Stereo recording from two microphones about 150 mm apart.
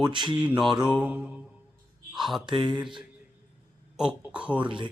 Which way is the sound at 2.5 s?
30° right (ahead or behind).